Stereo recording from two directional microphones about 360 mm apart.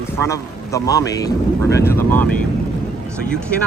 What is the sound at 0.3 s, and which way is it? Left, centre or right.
Speech, centre.